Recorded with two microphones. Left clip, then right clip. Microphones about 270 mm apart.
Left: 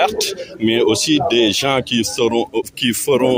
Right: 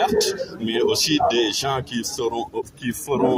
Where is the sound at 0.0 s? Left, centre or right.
Left.